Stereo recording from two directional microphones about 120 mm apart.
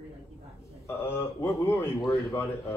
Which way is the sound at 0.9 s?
20° left (ahead or behind).